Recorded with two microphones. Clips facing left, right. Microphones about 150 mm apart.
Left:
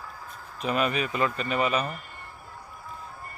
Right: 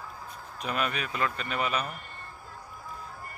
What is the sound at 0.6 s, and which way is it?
Speech, centre (ahead or behind).